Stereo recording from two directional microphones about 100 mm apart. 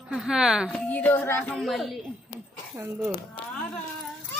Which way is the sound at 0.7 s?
15° left (ahead or behind).